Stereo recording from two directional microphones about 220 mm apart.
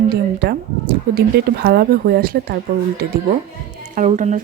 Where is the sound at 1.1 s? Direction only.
45° right (ahead or behind).